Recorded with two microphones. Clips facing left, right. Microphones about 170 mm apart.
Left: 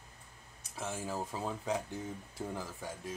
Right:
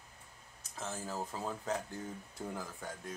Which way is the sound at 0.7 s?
10° left (ahead or behind).